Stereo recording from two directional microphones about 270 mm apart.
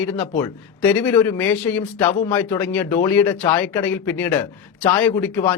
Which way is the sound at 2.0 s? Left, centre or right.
Left.